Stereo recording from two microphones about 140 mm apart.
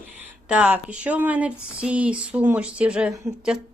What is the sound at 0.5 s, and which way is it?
Speech, 10° right (ahead or behind).